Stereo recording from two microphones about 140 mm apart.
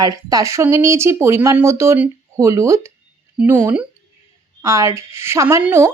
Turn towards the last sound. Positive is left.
turn(degrees=-15)  # may be behind; listen again after turning